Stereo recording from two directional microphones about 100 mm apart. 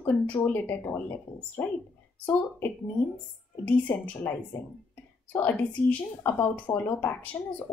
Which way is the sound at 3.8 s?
15° left (ahead or behind).